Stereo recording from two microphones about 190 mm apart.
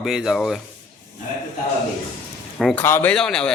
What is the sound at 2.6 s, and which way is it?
Speech, centre (ahead or behind).